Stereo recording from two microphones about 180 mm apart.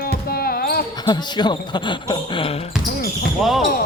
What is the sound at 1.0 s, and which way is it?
Speech, 25° left (ahead or behind).